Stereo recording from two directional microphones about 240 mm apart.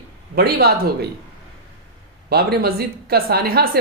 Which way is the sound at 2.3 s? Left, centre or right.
Right.